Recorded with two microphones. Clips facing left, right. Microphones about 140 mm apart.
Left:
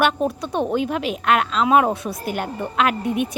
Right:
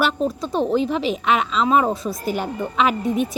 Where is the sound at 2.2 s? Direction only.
55° left (ahead or behind).